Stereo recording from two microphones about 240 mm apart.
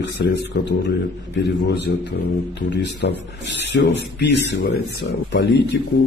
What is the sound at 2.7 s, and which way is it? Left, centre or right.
A man's voice, left.